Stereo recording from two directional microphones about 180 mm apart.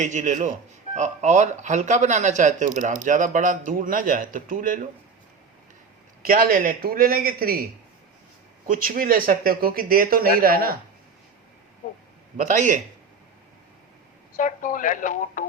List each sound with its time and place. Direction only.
0.0 s speech: 40° right (ahead or behind)
6.2 s speech: 50° right (ahead or behind)
8.6 s speech: 50° right (ahead or behind)
12.4 s speech: 45° right (ahead or behind)
14.3 s speech: 45° left (ahead or behind)